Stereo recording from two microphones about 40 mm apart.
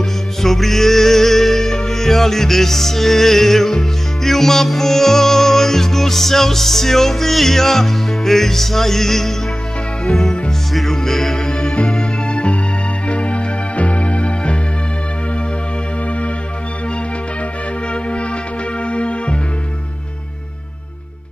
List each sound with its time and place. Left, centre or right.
0.0 s music: centre
10.0 s music: centre
10.7 s music: centre; by 14.6 s left
18.8 s music: left